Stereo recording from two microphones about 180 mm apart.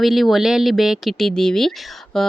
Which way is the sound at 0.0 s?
Centre (ahead or behind).